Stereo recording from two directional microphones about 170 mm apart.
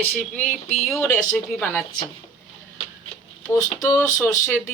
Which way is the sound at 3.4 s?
15° left (ahead or behind).